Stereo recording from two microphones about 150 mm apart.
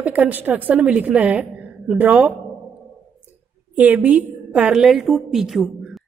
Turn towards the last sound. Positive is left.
turn(degrees=0)  # may be behind; listen again after turning